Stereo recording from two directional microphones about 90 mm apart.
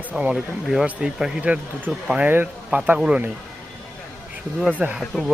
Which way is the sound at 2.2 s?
20° right (ahead or behind).